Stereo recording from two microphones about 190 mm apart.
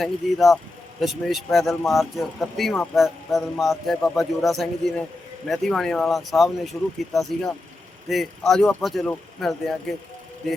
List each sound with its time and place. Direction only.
0.0 s speech: centre (ahead or behind)